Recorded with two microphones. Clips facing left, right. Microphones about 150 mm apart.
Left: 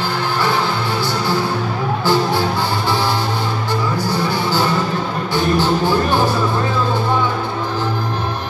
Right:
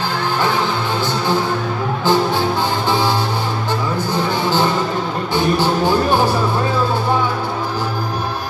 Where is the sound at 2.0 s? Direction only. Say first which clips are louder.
Right 1 dB; 15° right (ahead or behind).